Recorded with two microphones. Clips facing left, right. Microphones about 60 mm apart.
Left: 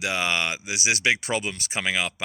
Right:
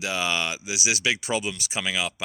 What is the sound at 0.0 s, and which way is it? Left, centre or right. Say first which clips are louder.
Speech: left 1 dB; left.